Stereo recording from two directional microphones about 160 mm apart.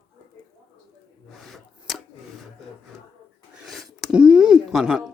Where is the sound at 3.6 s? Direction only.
Centre (ahead or behind).